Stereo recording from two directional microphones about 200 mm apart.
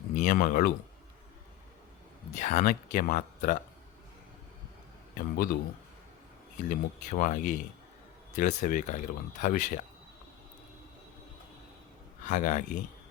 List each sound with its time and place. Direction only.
0.1 s speech: 40° left (ahead or behind)
2.3 s speech: 35° left (ahead or behind)
5.1 s speech: 50° left (ahead or behind)
6.7 s speech: 40° left (ahead or behind)
12.2 s speech: 40° left (ahead or behind)